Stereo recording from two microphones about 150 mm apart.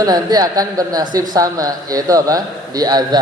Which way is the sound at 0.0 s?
25° right (ahead or behind).